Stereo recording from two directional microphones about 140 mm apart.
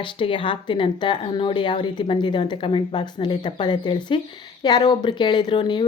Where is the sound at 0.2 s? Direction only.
35° left (ahead or behind).